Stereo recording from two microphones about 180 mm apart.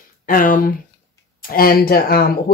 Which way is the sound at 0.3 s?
50° left (ahead or behind).